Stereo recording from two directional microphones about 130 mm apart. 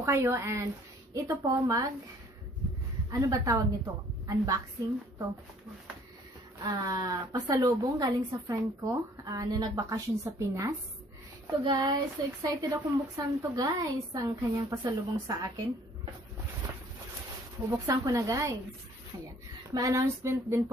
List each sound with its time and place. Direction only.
0.0 s speech: 20° right (ahead or behind)
3.1 s speech: 25° right (ahead or behind)
6.6 s speech: 25° right (ahead or behind)
17.6 s speech: 25° right (ahead or behind)